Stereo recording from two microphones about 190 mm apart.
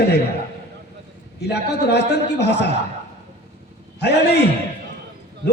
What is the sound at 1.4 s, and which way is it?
A man's voice, 60° left (ahead or behind).